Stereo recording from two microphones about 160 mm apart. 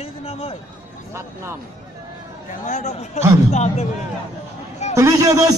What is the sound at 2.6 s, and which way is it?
Speech, 50° left (ahead or behind).